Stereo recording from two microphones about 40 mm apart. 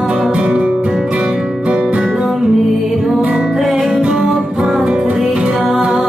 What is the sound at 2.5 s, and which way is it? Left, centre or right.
Music, centre.